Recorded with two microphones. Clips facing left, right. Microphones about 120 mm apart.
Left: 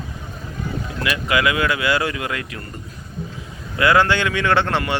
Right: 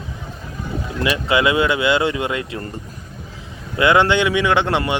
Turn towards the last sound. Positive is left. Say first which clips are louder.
# right 2 dB
turn(degrees=-15)  # may be behind; listen again after turning